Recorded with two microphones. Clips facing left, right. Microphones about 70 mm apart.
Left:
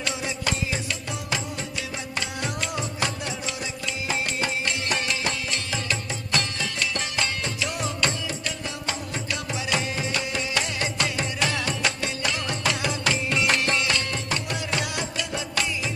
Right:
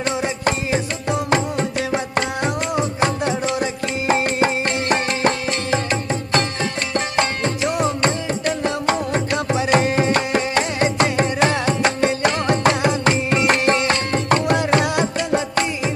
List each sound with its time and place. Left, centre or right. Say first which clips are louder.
0.0 s music: right 8 dB; right